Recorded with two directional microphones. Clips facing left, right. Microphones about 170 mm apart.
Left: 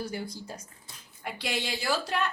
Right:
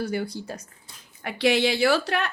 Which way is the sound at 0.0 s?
70° right (ahead or behind).